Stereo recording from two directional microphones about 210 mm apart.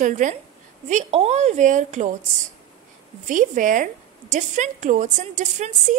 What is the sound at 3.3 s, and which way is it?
A woman's voice, 35° right (ahead or behind).